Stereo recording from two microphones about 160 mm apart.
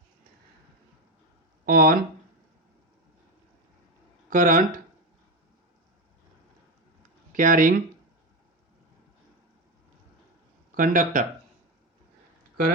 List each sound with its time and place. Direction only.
1.6 s speech: 60° right (ahead or behind)
4.3 s speech: 55° right (ahead or behind)
7.3 s speech: 55° right (ahead or behind)
10.8 s speech: 55° right (ahead or behind)